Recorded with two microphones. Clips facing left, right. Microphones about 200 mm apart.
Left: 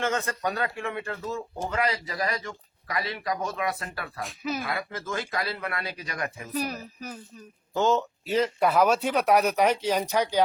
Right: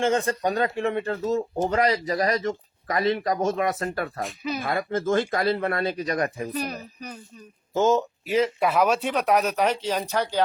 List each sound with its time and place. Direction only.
0.0 s speech: 30° right (ahead or behind)
4.2 s speech: centre (ahead or behind)
4.6 s speech: 50° right (ahead or behind)
6.5 s speech: 5° left (ahead or behind)
7.7 s speech: 20° right (ahead or behind)
7.9 s speech: 5° right (ahead or behind); by 10.4 s 10° left (ahead or behind)